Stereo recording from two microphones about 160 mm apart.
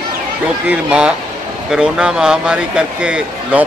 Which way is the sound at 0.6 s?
5° right (ahead or behind).